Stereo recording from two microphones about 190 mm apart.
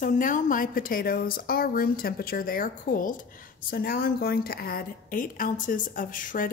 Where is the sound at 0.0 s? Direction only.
45° left (ahead or behind).